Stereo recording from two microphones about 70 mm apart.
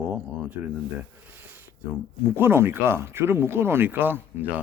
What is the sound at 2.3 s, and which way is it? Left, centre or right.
Speech, right.